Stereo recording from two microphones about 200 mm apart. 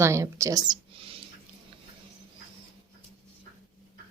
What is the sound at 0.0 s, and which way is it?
Speech, 15° right (ahead or behind).